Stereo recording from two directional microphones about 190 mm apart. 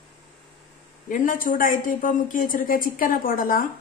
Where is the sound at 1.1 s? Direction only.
45° left (ahead or behind).